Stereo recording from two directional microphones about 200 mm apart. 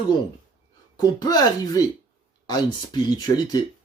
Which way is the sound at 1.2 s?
20° left (ahead or behind).